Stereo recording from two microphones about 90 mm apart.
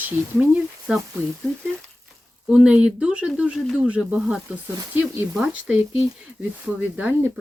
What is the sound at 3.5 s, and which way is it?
Speech, centre (ahead or behind).